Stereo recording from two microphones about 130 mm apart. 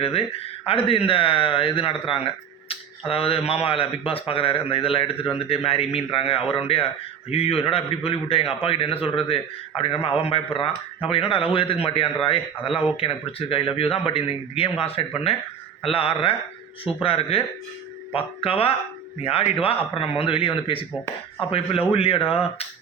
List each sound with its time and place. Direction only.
0.0 s speech: 50° left (ahead or behind)